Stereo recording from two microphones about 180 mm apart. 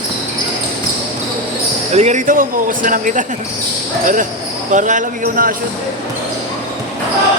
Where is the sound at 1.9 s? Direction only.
40° right (ahead or behind).